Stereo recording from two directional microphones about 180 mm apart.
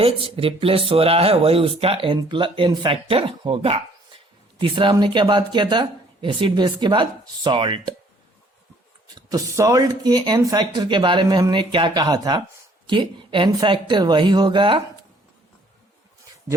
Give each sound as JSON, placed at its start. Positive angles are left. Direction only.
{"t": 0.0, "sound": "speech", "side_deg": -30}
{"t": 9.1, "sound": "speech", "side_deg": -20}